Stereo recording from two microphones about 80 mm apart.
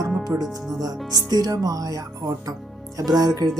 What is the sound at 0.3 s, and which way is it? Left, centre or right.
Speech, right.